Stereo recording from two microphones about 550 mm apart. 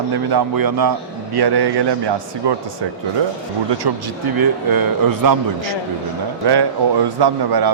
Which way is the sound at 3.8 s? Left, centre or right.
Right.